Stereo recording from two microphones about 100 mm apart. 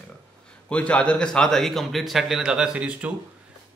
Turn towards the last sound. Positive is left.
turn(degrees=-10)  # may be behind; listen again after turning